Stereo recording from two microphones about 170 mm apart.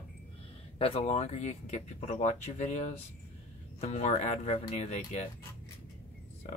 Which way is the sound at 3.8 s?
40° left (ahead or behind).